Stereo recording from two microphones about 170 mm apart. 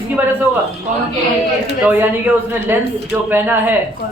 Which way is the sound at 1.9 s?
10° right (ahead or behind).